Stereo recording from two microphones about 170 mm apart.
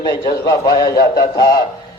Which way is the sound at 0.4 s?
20° left (ahead or behind).